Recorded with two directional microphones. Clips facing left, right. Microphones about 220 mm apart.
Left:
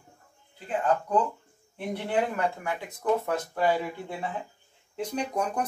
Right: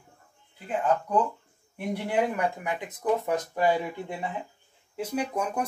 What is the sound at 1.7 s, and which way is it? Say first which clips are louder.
Speech: right 1 dB; 15° right (ahead or behind).